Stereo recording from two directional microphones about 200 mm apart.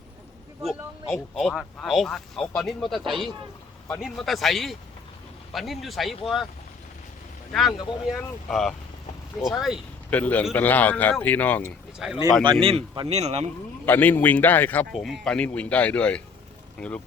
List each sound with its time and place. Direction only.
0.6 s speech: centre (ahead or behind)
7.5 s speech: centre (ahead or behind)
11.9 s speech: centre (ahead or behind)
12.2 s speech: 20° right (ahead or behind)
13.8 s speech: 10° left (ahead or behind)